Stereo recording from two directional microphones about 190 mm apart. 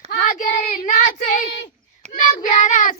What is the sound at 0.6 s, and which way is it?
Child singing, 40° left (ahead or behind).